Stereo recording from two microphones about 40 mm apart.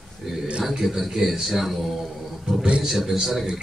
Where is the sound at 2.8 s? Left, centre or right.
Centre.